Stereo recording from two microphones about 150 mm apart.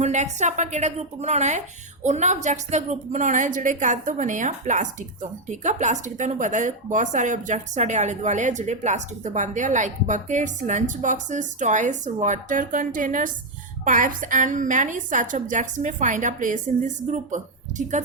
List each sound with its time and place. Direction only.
0.0 s a woman's voice: 50° right (ahead or behind)